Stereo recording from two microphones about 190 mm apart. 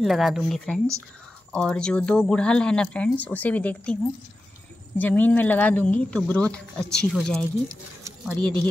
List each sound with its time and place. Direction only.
0.0 s speech: centre (ahead or behind)